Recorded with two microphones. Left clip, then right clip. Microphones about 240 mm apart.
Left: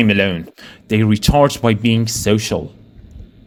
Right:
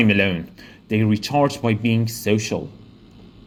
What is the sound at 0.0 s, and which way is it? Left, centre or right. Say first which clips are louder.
Speech: left 3 dB; left.